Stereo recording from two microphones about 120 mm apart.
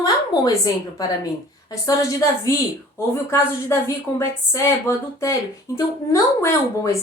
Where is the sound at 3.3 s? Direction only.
25° left (ahead or behind).